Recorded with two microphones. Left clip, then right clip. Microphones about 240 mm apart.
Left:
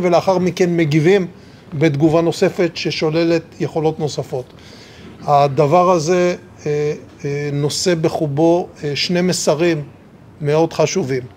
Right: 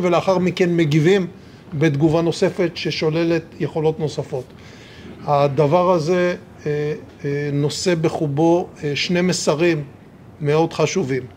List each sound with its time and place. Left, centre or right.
0.0 s a man's voice: left
1.8 s a sound: left
10.4 s a man's voice: left